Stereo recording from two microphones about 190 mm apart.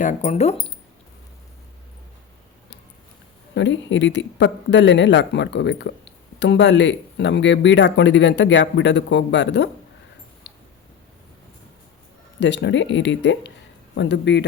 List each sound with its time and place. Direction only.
0.2 s speech: 35° left (ahead or behind)
3.5 s speech: 70° left (ahead or behind)
10.5 s tick-tock: 65° left (ahead or behind)
12.4 s speech: 65° left (ahead or behind)